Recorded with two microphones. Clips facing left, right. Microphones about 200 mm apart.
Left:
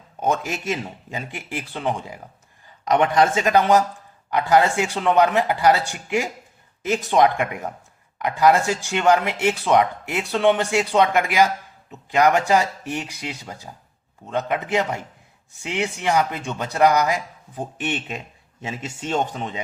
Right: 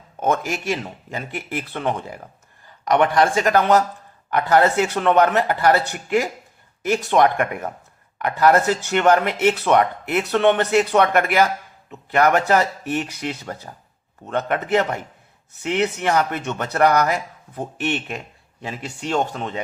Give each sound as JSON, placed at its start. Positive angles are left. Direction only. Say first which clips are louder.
{"t": 0.3, "sound": "a man's voice", "louder": "right 2 dB", "side_deg": 15}
{"t": 19.2, "sound": "speech", "louder": "right 1 dB", "side_deg": 15}